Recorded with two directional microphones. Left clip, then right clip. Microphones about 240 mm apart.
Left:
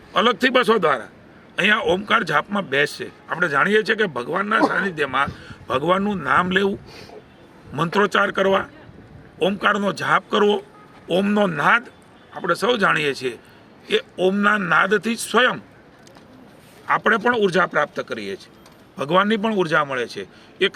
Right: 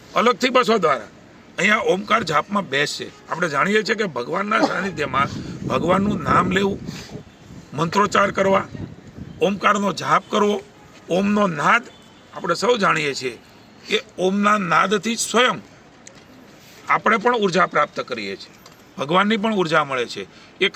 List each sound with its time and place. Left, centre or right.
0.1 s a man's voice: centre
7.8 s a man's voice: centre
16.8 s a man's voice: centre